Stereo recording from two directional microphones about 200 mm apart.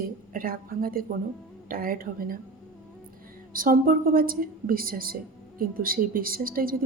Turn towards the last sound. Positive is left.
turn(degrees=-45)  # may be behind; listen again after turning